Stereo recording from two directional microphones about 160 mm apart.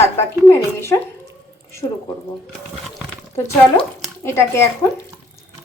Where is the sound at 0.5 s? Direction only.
15° left (ahead or behind).